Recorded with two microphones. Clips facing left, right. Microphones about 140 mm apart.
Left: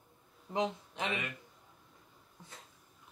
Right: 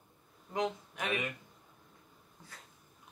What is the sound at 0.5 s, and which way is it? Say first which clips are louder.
Speech: left 1 dB; 25° left (ahead or behind).